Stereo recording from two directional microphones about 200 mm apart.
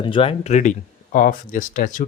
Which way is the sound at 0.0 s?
25° left (ahead or behind).